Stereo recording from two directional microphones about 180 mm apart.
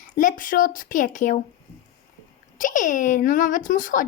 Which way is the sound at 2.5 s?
45° left (ahead or behind).